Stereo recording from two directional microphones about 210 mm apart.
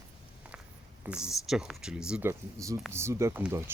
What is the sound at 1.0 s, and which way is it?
Speech, 5° right (ahead or behind).